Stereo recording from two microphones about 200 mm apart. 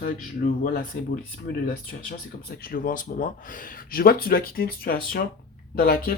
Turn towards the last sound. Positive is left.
turn(degrees=45)  # may be behind; listen again after turning